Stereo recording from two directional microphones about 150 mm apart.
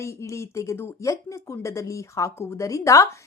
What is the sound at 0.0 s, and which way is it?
Speech, 20° left (ahead or behind).